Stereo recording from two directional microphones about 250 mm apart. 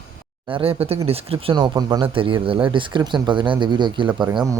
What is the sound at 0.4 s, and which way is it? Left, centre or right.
Speech, right.